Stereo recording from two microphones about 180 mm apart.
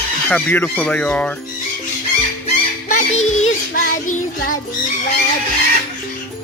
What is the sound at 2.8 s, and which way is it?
Music, 40° left (ahead or behind).